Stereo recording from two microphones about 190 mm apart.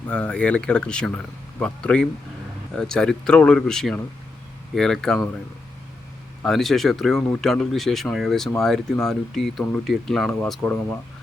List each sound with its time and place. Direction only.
0.1 s speech: 5° left (ahead or behind)
6.4 s speech: centre (ahead or behind)